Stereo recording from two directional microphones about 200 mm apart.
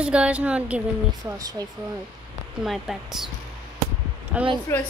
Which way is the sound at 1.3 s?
20° right (ahead or behind).